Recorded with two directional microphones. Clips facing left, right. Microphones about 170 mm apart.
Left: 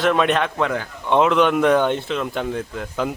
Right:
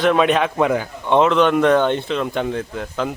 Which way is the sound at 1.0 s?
5° left (ahead or behind).